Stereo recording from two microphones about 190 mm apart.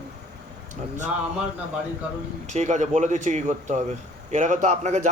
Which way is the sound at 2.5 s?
40° right (ahead or behind).